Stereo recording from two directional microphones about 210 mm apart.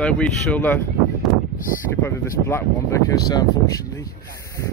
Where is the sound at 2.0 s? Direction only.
10° left (ahead or behind).